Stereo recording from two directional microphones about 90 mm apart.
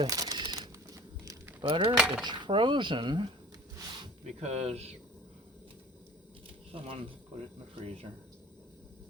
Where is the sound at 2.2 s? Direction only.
60° right (ahead or behind).